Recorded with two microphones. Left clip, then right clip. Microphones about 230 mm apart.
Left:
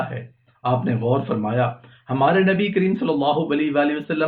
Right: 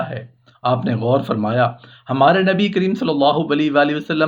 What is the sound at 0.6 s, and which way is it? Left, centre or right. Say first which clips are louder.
Speech: right 3 dB; right.